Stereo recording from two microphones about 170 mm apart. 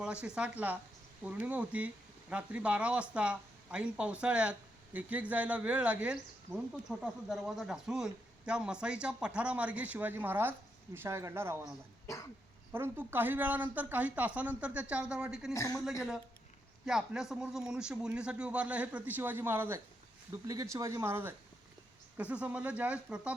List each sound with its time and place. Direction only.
0.0 s speech: 5° right (ahead or behind)
12.7 s speech: 15° right (ahead or behind)
15.5 s speech: 20° left (ahead or behind)
15.8 s speech: centre (ahead or behind)